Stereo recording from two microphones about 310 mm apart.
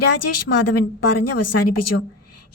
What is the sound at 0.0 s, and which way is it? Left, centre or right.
A woman's voice, left.